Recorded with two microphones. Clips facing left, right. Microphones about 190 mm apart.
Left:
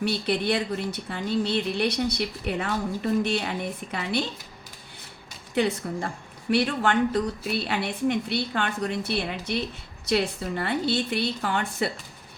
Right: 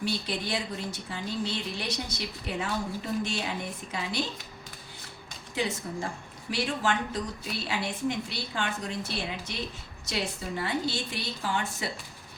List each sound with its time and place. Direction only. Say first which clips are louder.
0.0 s a woman's voice: left 6 dB; 65° left (ahead or behind)
5.5 s a woman's voice: left 6 dB; 60° left (ahead or behind)